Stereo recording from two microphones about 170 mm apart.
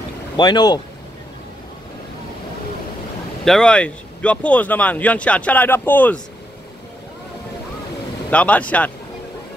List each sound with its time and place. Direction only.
0.4 s speech: 25° left (ahead or behind)
3.4 s speech: 5° left (ahead or behind)
8.3 s speech: 10° left (ahead or behind)